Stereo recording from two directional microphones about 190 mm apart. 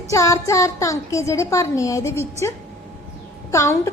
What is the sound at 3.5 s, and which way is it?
Speech, 15° left (ahead or behind).